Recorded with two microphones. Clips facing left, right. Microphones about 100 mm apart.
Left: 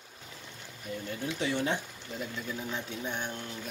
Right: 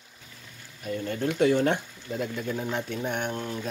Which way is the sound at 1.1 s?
60° right (ahead or behind).